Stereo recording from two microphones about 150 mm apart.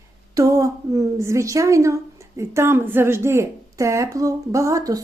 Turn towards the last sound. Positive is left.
turn(degrees=-25)  # may be behind; listen again after turning